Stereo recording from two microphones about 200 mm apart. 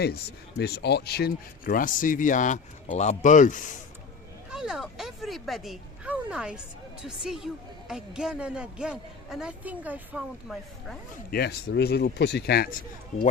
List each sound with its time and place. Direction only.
0.6 s speech: 55° left (ahead or behind); by 3.7 s 40° left (ahead or behind)
4.5 s a woman's voice: centre (ahead or behind)
11.3 s speech: 55° left (ahead or behind)